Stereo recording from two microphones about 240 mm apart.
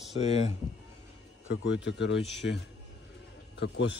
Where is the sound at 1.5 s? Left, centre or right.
Left.